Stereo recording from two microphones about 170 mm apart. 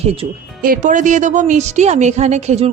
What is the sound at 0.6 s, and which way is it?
A woman's voice, 55° right (ahead or behind).